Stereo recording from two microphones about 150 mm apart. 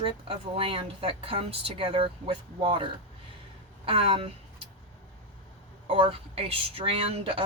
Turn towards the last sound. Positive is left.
turn(degrees=-40)  # may be behind; listen again after turning